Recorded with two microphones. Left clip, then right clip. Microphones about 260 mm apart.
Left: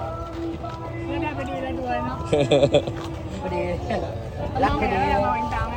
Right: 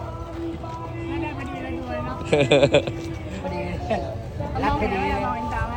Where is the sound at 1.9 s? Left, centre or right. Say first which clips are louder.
Right 1 dB; centre.